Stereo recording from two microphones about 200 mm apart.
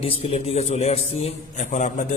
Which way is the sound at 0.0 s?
30° left (ahead or behind).